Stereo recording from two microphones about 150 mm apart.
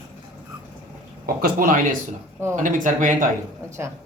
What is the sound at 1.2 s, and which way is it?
Speech, 80° right.